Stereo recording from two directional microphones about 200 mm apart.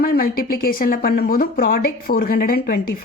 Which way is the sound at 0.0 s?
50° left (ahead or behind).